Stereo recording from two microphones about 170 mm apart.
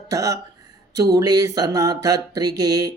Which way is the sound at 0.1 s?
20° right (ahead or behind).